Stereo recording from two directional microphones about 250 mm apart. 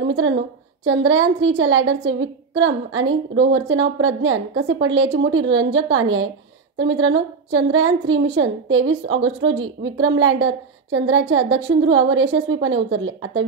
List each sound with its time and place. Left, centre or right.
0.8 s a woman's voice: right